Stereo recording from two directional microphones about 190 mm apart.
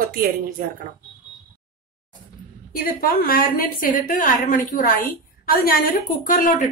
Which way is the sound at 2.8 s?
50° left (ahead or behind).